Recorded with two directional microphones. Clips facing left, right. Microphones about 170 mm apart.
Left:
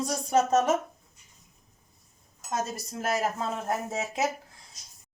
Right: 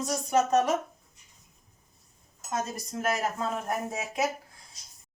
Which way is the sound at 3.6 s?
25° left (ahead or behind).